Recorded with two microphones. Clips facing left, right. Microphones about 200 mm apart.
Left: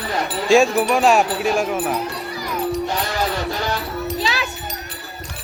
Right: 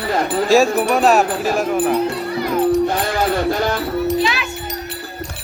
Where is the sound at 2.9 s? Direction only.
50° right (ahead or behind).